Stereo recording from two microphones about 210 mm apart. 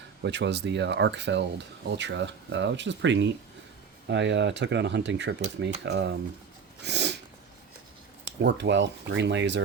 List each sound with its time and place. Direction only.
0.2 s speech: 55° right (ahead or behind)
6.8 s sneeze: 55° right (ahead or behind)
8.2 s speech: 55° right (ahead or behind)